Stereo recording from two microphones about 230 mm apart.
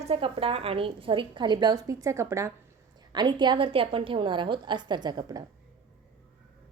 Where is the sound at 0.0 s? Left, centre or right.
Right.